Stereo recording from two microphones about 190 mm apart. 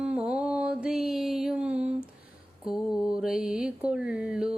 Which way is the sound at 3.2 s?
5° right (ahead or behind).